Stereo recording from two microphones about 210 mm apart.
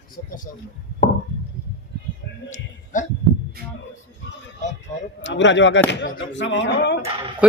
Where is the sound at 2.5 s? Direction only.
35° left (ahead or behind).